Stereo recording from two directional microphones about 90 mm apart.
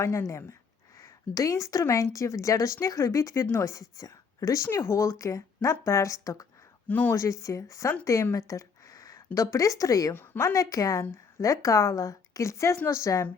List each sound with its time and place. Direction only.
0.0 s a woman's voice: 35° left (ahead or behind)
6.8 s speech: 20° left (ahead or behind)
7.1 s a woman's voice: 35° left (ahead or behind)